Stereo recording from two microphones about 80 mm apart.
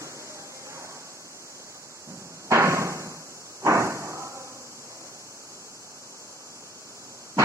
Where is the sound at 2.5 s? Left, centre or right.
Right.